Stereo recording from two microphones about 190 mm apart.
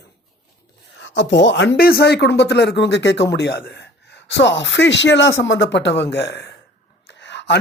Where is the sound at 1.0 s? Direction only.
70° left (ahead or behind).